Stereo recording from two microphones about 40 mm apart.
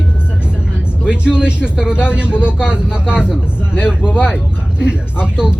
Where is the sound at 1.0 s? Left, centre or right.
Right.